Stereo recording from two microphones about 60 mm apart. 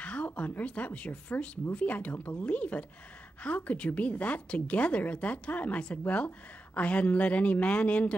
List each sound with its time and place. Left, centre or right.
0.0 s speech: left